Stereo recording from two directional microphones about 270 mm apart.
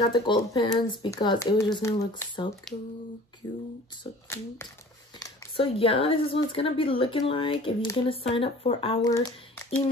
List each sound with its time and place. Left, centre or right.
0.1 s speech: centre
4.0 s speech: centre